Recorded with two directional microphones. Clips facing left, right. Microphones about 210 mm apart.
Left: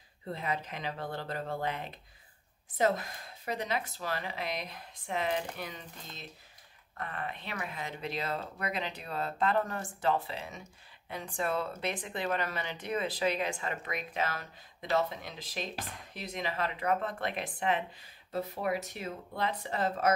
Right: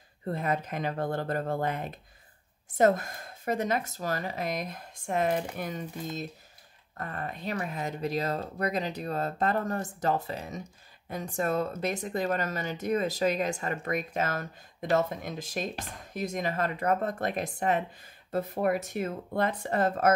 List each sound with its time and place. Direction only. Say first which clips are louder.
0.3 s speech: right 6 dB; 50° right (ahead or behind)